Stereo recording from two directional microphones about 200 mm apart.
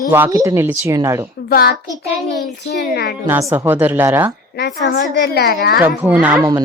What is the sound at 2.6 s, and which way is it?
Speech, 55° left (ahead or behind).